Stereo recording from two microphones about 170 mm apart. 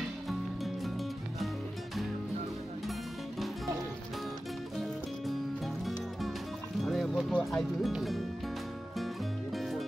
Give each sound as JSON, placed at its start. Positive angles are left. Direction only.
{"t": 0.8, "sound": "music", "side_deg": 0}
{"t": 6.8, "sound": "music", "side_deg": 0}